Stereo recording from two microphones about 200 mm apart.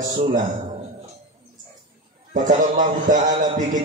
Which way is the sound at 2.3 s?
40° right (ahead or behind).